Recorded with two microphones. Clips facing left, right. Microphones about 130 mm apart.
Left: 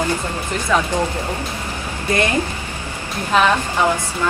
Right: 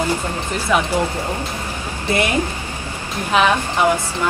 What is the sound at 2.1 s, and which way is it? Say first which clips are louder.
Speech: even; 15° right (ahead or behind).